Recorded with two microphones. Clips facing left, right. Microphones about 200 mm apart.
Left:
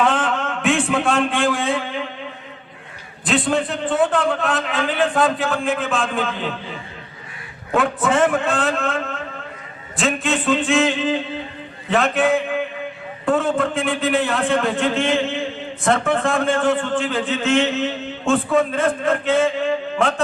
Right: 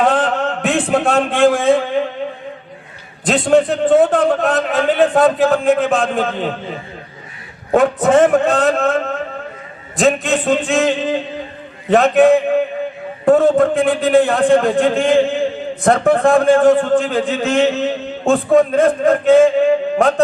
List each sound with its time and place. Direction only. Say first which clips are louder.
0.0 s a sound: right 4 dB; 40° right (ahead or behind)
3.2 s a man's voice: right 7 dB; 45° right (ahead or behind)
13.7 s a man's voice: right 7 dB; 50° right (ahead or behind)